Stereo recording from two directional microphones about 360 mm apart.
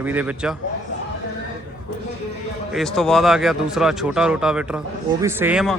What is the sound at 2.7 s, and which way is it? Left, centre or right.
Speech, centre.